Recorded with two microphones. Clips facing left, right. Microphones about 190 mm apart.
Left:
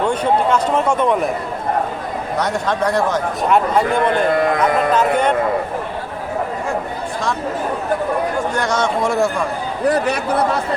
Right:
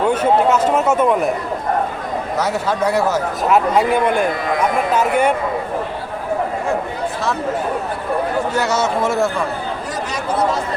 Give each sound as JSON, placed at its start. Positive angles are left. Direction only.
{"t": 0.1, "sound": "a man's voice", "side_deg": -5}
{"t": 2.4, "sound": "a man's voice", "side_deg": -5}
{"t": 8.5, "sound": "a man's voice", "side_deg": -5}
{"t": 9.8, "sound": "a man's voice", "side_deg": 60}